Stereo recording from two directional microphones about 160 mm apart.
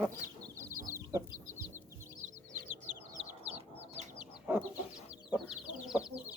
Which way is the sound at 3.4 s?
40° right (ahead or behind).